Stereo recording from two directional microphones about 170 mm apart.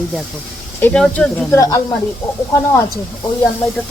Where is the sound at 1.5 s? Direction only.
20° left (ahead or behind).